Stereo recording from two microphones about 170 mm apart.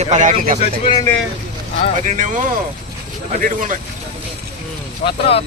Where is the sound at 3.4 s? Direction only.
50° right (ahead or behind).